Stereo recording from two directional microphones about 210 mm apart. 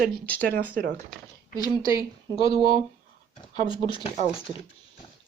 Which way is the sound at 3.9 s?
25° left (ahead or behind).